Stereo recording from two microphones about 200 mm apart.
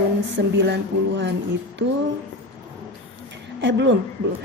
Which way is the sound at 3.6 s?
65° right (ahead or behind).